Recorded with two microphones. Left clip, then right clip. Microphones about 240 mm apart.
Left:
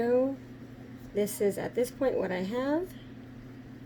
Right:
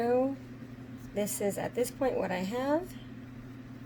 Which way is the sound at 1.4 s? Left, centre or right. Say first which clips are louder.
Left 2 dB; centre.